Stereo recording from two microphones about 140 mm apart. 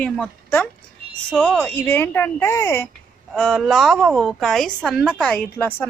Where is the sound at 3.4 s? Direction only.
5° left (ahead or behind).